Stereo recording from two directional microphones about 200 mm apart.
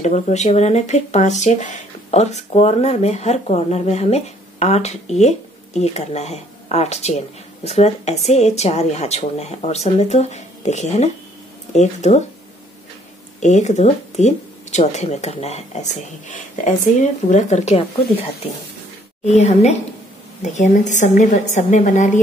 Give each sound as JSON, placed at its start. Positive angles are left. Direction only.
{"t": 0.0, "sound": "speech", "side_deg": 35}
{"t": 13.4, "sound": "speech", "side_deg": 35}
{"t": 19.2, "sound": "speech", "side_deg": 35}